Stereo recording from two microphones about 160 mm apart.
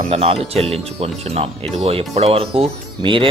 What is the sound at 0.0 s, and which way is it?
Speech, 40° right (ahead or behind).